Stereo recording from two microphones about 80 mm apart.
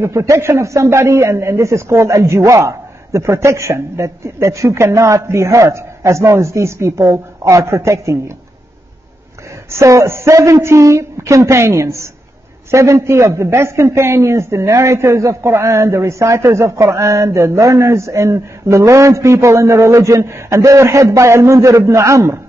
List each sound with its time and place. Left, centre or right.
0.0 s a man's voice: right
9.7 s a man's voice: right